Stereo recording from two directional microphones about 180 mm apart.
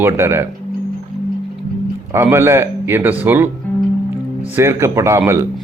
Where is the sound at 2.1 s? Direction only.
15° right (ahead or behind).